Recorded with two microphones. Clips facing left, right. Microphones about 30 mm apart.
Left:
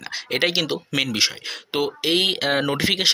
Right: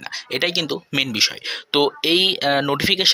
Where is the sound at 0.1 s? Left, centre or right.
Centre.